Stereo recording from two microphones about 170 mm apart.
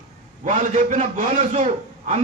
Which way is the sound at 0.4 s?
50° right (ahead or behind).